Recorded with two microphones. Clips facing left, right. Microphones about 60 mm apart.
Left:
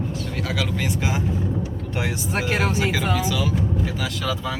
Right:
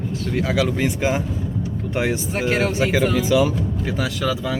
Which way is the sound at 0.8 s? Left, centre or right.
Right.